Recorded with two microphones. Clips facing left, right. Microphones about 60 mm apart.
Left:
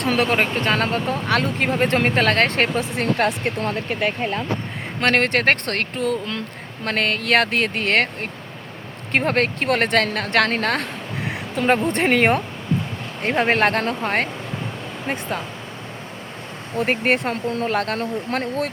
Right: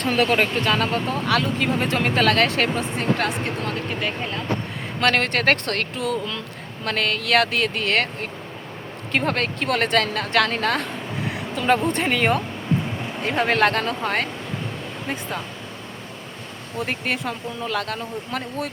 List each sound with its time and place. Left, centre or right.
0.0 s speech: left
0.3 s speech: left
4.2 s speech: left
4.9 s speech: left
11.3 s a sound: left
11.9 s speech: left
13.4 s speech: left
16.7 s speech: left